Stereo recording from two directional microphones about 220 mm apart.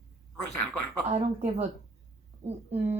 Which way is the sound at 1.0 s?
30° right (ahead or behind).